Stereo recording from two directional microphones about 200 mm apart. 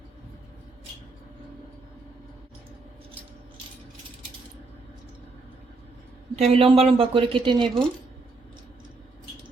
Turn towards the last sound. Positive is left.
turn(degrees=-25)  # may be behind; listen again after turning